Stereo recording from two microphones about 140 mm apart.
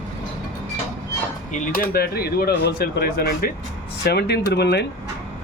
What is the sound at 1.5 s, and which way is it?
Speech, 75° left (ahead or behind).